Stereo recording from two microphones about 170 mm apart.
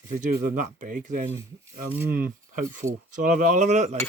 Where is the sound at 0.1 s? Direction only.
50° right (ahead or behind).